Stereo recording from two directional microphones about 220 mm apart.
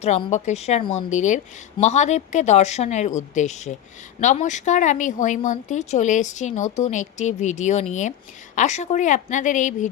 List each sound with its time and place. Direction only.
0.0 s speech: 30° left (ahead or behind)